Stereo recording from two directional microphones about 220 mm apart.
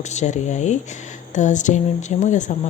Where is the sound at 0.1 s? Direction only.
30° left (ahead or behind).